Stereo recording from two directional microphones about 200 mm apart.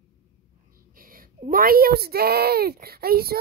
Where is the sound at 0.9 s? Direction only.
45° right (ahead or behind).